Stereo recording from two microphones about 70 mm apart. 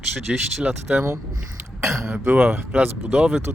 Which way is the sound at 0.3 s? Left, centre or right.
Centre.